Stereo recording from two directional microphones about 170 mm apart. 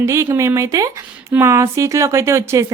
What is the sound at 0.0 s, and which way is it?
A woman's voice, 20° right (ahead or behind).